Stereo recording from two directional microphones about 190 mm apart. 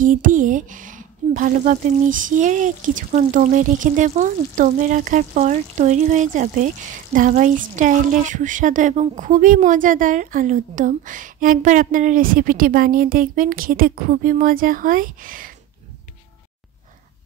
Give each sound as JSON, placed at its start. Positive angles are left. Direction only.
{"t": 0.0, "sound": "a woman's voice", "side_deg": -45}